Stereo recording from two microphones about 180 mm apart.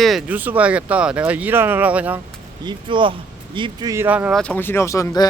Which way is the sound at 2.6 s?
25° right (ahead or behind).